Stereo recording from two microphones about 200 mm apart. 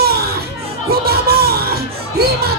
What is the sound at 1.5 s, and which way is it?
Music, 50° right (ahead or behind).